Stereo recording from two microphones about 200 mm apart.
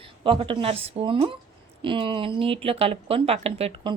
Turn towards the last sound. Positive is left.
turn(degrees=-25)  # may be behind; listen again after turning